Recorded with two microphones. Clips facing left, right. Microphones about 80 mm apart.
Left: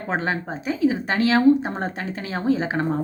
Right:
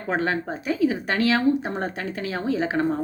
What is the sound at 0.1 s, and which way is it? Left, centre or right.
A woman's voice, left.